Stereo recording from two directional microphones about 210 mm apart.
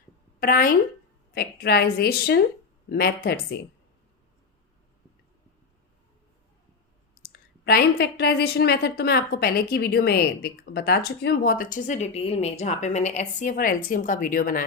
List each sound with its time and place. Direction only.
0.3 s a sound: 40° left (ahead or behind)
1.3 s a woman's voice: 50° left (ahead or behind)
7.2 s a woman's voice: 50° left (ahead or behind)